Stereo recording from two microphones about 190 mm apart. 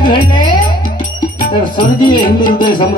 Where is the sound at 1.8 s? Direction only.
25° left (ahead or behind).